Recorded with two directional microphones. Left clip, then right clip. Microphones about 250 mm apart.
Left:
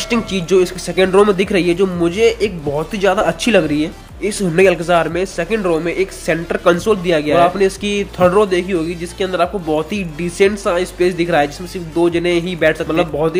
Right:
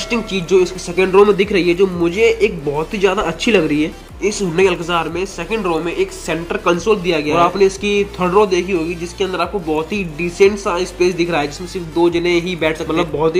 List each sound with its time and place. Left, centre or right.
0.1 s speech: left
4.3 s speech: left